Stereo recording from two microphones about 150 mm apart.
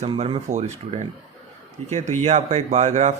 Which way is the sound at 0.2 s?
45° right (ahead or behind).